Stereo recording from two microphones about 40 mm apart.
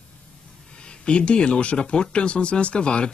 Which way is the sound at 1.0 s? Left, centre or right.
Left.